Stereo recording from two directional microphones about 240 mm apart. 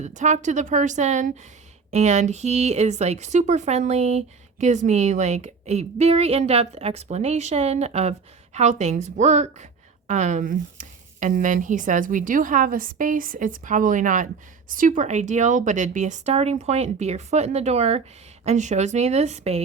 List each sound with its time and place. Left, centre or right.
0.0 s a woman's voice: right